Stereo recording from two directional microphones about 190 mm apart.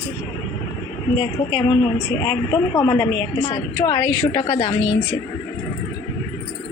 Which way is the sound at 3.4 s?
20° left (ahead or behind).